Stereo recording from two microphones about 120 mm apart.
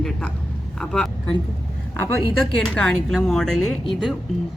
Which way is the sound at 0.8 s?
5° left (ahead or behind).